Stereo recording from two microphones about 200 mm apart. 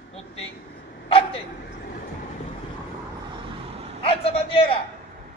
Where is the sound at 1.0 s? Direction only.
25° left (ahead or behind).